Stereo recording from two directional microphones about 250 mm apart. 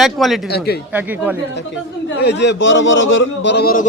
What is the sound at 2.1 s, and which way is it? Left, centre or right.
A man's voice, left.